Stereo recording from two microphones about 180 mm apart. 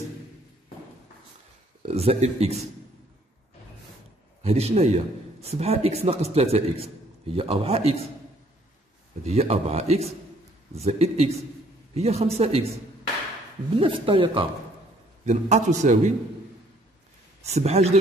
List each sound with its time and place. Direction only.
1.8 s a man's voice: 35° right (ahead or behind)
4.4 s a man's voice: 35° right (ahead or behind)
9.2 s a man's voice: 35° right (ahead or behind)
13.7 s speech: 30° right (ahead or behind)
15.2 s a man's voice: 40° right (ahead or behind)
17.4 s speech: 35° right (ahead or behind)